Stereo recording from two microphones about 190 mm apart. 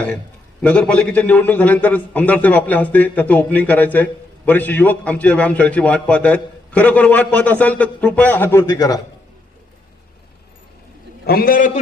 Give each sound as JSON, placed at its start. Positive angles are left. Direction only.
{"t": 0.6, "sound": "a man's voice", "side_deg": 5}
{"t": 11.3, "sound": "a man's voice", "side_deg": 50}